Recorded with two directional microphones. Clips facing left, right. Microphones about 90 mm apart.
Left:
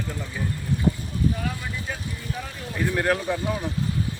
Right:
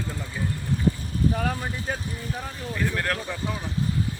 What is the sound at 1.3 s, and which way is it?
Speech, 45° right (ahead or behind).